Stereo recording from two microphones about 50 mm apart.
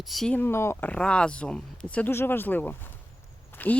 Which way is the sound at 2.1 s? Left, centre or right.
Left.